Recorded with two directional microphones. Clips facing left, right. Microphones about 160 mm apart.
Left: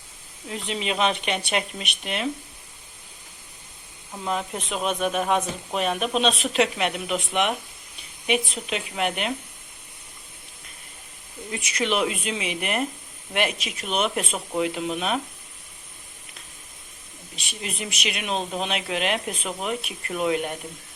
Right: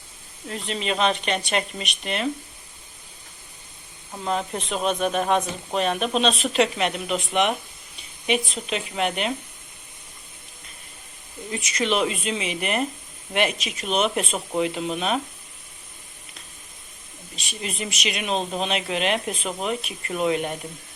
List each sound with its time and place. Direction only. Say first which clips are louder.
0.4 s speech: right 1 dB; 5° left (ahead or behind)
4.1 s speech: right 2 dB; 5° left (ahead or behind)
11.4 s speech: right 1 dB; 5° left (ahead or behind)
17.5 s speech: right 2 dB; centre (ahead or behind)